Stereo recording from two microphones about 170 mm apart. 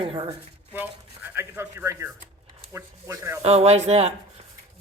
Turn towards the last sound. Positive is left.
turn(degrees=-40)  # may be behind; listen again after turning